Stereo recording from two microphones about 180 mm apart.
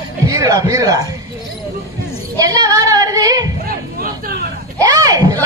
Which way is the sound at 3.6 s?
55° right (ahead or behind).